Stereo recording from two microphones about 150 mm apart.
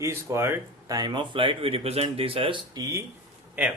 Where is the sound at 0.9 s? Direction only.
30° right (ahead or behind).